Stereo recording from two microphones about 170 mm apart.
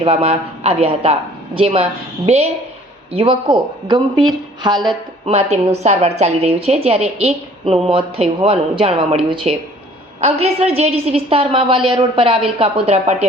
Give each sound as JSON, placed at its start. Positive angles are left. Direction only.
{"t": 0.0, "sound": "a woman's voice", "side_deg": -35}
{"t": 5.3, "sound": "a woman's voice", "side_deg": -40}